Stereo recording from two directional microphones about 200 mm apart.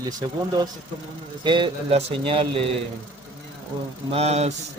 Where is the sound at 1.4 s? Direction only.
25° right (ahead or behind).